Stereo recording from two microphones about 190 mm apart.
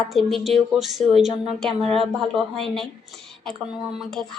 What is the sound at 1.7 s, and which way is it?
Speech, 30° right (ahead or behind).